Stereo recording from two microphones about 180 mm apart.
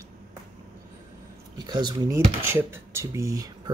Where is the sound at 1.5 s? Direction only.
25° right (ahead or behind).